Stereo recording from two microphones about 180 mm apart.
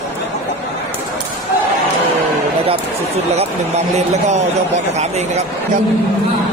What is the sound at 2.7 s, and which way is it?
Speech, 35° right (ahead or behind).